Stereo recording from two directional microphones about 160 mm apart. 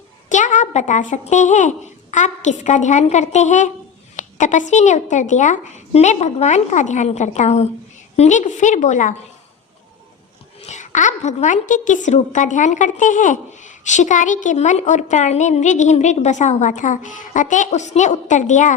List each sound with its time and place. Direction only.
0.3 s a woman's voice: 50° left (ahead or behind)
10.6 s a woman's voice: 45° left (ahead or behind)